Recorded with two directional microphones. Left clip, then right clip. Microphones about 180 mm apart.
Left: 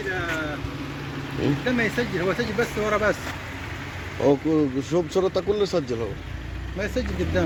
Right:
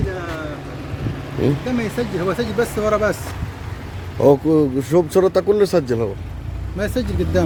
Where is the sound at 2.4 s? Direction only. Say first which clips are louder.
Right 5 dB; 70° right (ahead or behind).